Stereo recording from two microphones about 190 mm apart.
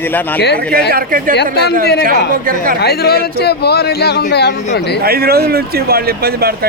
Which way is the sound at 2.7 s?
55° left (ahead or behind).